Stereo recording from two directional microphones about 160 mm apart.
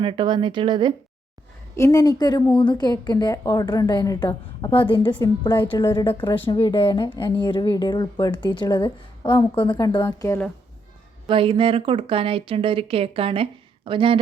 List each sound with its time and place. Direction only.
0.0 s speech: 30° right (ahead or behind)
1.7 s speech: 20° left (ahead or behind)
4.6 s a woman's voice: 30° left (ahead or behind)
11.3 s speech: 35° right (ahead or behind)